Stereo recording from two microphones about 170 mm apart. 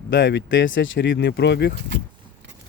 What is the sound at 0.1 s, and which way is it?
Speech, 90° left.